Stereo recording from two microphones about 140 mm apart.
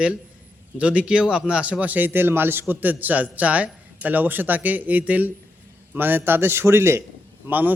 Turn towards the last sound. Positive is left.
turn(degrees=-10)  # may be behind; listen again after turning